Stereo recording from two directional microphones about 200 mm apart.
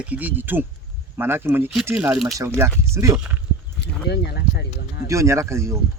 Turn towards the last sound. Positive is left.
turn(degrees=-15)  # may be behind; listen again after turning